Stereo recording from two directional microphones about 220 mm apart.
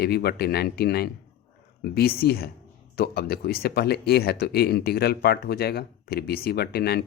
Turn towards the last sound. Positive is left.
turn(degrees=45)  # may be behind; listen again after turning